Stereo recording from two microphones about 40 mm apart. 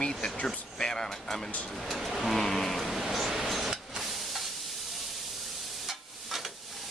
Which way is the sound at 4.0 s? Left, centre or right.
Centre.